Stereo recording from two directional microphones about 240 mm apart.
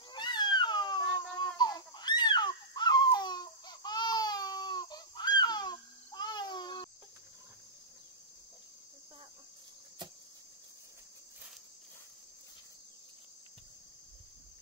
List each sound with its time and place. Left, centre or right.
0.1 s cat: centre